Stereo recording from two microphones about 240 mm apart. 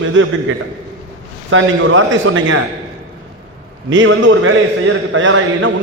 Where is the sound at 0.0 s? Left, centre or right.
Right.